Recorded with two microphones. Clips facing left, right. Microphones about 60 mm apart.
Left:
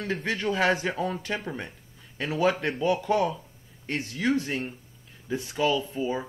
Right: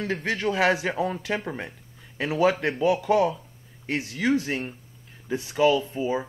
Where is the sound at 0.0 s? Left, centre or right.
Centre.